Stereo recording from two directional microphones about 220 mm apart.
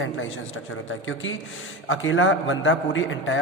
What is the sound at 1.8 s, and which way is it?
A man's voice, 60° left (ahead or behind).